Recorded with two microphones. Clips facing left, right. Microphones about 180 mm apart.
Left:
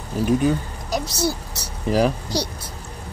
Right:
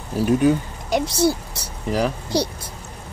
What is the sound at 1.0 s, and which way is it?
Speech, 55° right (ahead or behind).